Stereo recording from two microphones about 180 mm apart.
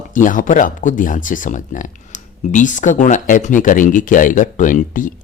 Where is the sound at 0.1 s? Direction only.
50° left (ahead or behind).